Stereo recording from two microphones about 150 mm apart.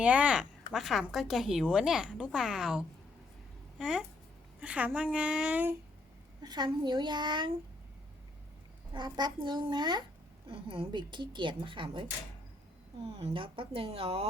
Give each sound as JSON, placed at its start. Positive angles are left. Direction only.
{"t": 0.0, "sound": "a woman's voice", "side_deg": -10}
{"t": 4.6, "sound": "a sound", "side_deg": -10}
{"t": 6.4, "sound": "a woman's voice", "side_deg": -30}
{"t": 8.9, "sound": "a woman's voice", "side_deg": -30}
{"t": 13.1, "sound": "speech", "side_deg": -45}